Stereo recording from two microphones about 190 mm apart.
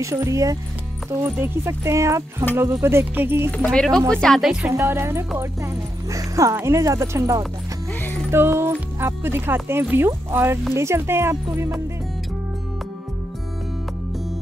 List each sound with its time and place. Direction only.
0.0 s speech: 15° right (ahead or behind)
3.5 s speech: 5° left (ahead or behind); by 7.4 s 15° right (ahead or behind)
8.0 s music: 10° left (ahead or behind)
8.3 s speech: 10° right (ahead or behind)